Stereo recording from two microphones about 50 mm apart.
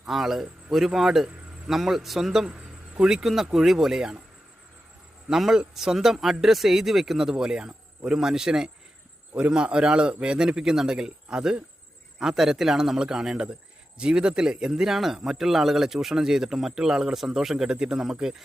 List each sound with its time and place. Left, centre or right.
0.0 s a man's voice: centre
5.3 s a man's voice: centre